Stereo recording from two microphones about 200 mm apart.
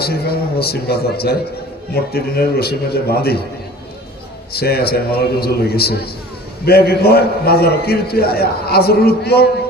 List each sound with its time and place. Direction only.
0.0 s a man's voice: 50° left (ahead or behind)
4.5 s a man's voice: 50° left (ahead or behind)